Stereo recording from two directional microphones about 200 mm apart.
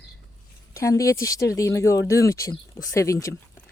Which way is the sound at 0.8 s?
15° left (ahead or behind).